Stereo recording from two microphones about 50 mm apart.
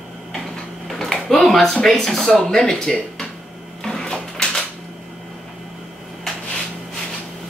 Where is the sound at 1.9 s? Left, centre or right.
Centre.